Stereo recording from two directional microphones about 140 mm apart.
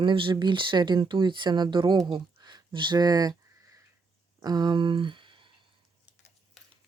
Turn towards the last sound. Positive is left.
turn(degrees=-35)  # may be behind; listen again after turning